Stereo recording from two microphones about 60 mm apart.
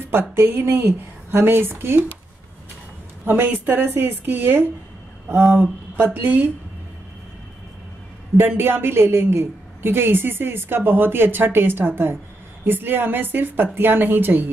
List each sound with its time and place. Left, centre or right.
0.1 s a woman's voice: right
3.3 s a woman's voice: right
5.9 s a woman's voice: right
8.4 s a woman's voice: right